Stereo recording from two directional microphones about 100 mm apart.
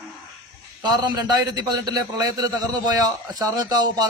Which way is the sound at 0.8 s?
45° right (ahead or behind).